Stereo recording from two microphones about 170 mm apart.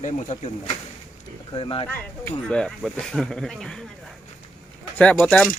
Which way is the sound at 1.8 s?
10° left (ahead or behind).